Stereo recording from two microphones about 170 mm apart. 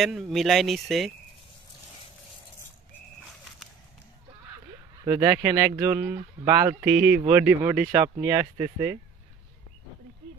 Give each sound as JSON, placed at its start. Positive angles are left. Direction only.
{"t": 0.0, "sound": "speech", "side_deg": 0}
{"t": 5.0, "sound": "speech", "side_deg": -15}
{"t": 6.8, "sound": "speech", "side_deg": -10}